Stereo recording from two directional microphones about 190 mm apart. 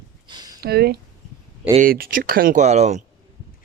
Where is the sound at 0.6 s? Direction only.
55° right (ahead or behind); by 3.0 s 35° right (ahead or behind).